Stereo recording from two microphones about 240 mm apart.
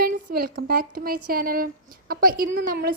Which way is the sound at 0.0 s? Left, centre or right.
Right.